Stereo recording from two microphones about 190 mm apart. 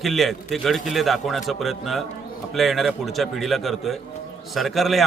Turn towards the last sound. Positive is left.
turn(degrees=0)  # may be behind; listen again after turning